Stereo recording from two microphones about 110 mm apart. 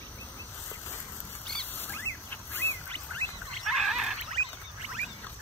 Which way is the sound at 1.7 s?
20° left (ahead or behind).